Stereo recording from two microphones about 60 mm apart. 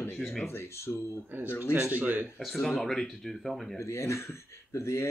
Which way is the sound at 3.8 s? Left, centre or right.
Left.